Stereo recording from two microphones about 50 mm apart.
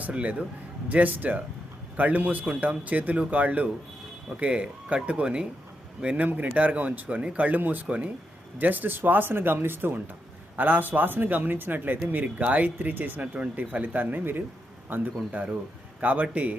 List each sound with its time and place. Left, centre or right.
0.1 s speech: right
4.4 s speech: right
6.1 s speech: right